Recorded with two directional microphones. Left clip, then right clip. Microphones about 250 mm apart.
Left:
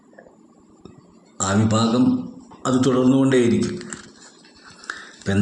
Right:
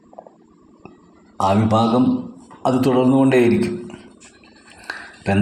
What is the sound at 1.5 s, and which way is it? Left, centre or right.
Speech, centre.